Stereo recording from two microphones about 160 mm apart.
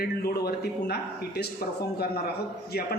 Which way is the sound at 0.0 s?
80° left.